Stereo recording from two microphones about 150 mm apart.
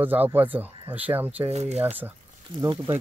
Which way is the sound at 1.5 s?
45° right (ahead or behind).